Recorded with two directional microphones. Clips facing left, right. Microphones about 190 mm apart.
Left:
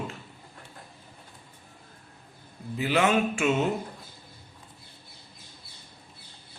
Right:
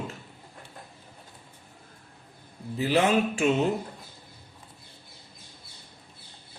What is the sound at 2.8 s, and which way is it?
Speech, 35° right (ahead or behind).